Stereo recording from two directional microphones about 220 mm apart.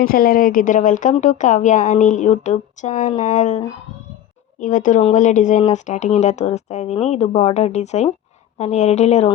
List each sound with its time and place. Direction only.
0.0 s speech: 40° left (ahead or behind)
4.6 s speech: 35° left (ahead or behind)